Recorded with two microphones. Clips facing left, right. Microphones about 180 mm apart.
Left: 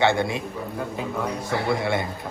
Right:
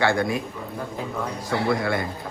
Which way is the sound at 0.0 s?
25° left (ahead or behind).